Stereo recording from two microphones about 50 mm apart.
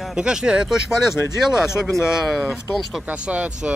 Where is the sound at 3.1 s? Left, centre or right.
Right.